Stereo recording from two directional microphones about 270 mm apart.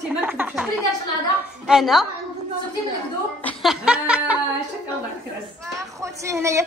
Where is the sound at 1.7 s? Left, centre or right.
Centre.